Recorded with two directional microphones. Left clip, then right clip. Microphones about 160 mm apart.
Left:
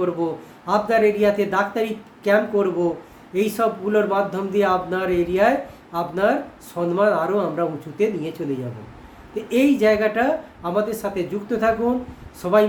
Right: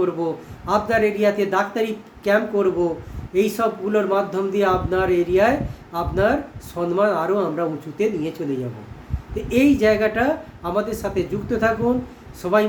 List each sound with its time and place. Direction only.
0.0 s a man's voice: centre (ahead or behind)
9.3 s a man's voice: centre (ahead or behind)